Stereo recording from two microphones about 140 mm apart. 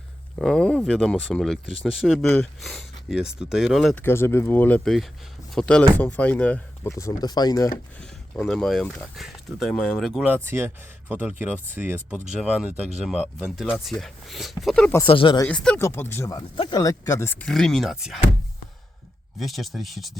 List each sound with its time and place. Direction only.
0.3 s speech: 5° left (ahead or behind)
4.0 s speech: 15° left (ahead or behind)
6.9 s speech: 25° left (ahead or behind)
8.0 s speech: 5° left (ahead or behind)
10.2 s speech: 15° right (ahead or behind); by 14.8 s centre (ahead or behind)
15.0 s speech: 40° left (ahead or behind)
15.4 s speech: 10° left (ahead or behind)
16.3 s speech: 30° left (ahead or behind)
17.4 s speech: centre (ahead or behind)
19.4 s speech: centre (ahead or behind)